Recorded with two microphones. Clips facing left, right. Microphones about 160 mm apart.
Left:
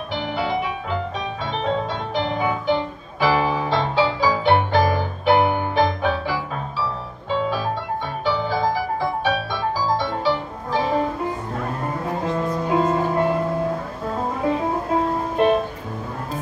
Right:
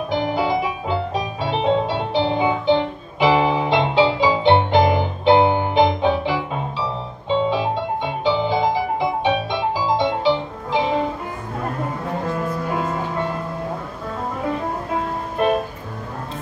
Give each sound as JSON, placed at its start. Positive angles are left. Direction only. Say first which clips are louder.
{"t": 0.1, "sound": "music", "louder": "right 3 dB", "side_deg": -40}
{"t": 12.3, "sound": "music", "louder": "left 4 dB", "side_deg": 25}
{"t": 15.0, "sound": "music", "louder": "left 3 dB", "side_deg": 30}